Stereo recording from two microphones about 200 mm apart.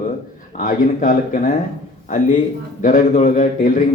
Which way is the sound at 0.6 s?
40° left (ahead or behind).